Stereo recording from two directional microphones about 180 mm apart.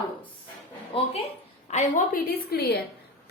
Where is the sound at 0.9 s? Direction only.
30° left (ahead or behind).